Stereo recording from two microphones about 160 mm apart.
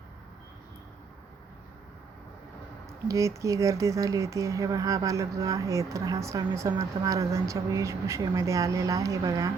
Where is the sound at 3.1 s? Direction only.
20° right (ahead or behind).